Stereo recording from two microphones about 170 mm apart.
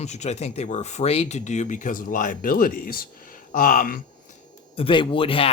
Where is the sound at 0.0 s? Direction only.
40° left (ahead or behind); by 4.0 s 55° left (ahead or behind).